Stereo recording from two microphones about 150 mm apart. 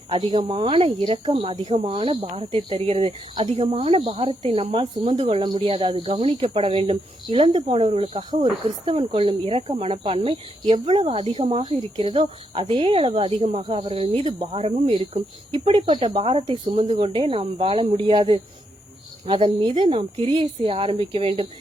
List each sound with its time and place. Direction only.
0.1 s speech: 35° right (ahead or behind)